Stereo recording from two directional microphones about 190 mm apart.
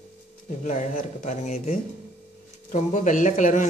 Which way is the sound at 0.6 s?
40° left (ahead or behind).